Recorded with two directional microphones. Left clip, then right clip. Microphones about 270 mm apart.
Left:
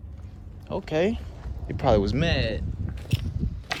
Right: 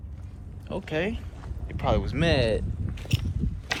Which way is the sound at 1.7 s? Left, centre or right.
Left.